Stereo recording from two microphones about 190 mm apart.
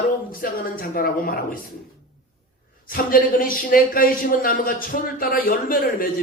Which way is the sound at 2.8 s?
50° left (ahead or behind).